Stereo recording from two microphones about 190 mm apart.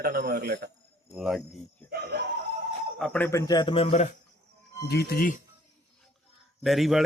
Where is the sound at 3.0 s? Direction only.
10° left (ahead or behind); by 4.1 s 35° left (ahead or behind).